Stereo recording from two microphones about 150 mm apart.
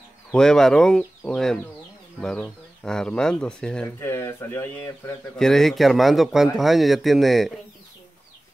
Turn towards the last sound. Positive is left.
turn(degrees=0)  # may be behind; listen again after turning